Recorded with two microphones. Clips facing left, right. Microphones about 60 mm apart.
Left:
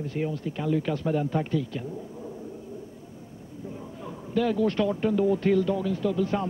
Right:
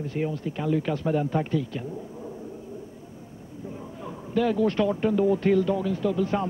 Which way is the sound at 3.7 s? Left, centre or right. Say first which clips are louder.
Right 2 dB; right.